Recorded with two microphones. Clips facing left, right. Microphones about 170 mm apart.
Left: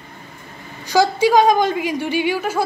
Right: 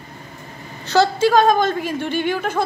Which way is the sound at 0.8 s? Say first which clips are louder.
Even; 15° left (ahead or behind).